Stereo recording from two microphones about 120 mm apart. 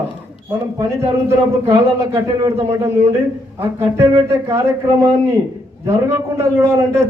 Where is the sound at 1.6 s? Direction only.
20° right (ahead or behind).